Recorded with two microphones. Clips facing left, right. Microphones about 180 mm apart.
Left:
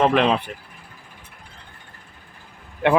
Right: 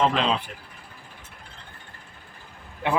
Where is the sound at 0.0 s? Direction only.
60° left (ahead or behind).